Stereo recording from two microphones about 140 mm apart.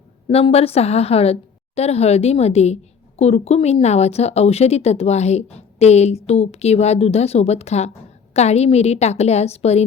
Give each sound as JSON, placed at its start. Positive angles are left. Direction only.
{"t": 0.3, "sound": "speech", "side_deg": 45}